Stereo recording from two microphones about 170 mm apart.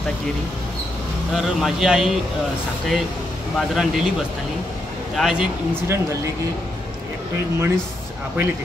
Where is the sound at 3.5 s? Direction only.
Centre (ahead or behind).